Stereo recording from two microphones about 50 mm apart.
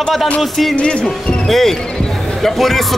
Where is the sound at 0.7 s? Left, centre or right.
Centre.